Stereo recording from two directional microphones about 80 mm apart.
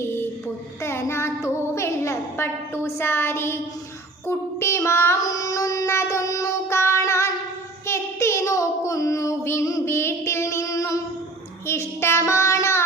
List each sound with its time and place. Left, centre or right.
0.8 s a sound: left
5.2 s child singing: left
11.6 s child singing: left